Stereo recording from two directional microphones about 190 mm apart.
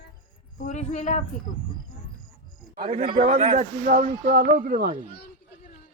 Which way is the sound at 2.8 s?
30° right (ahead or behind).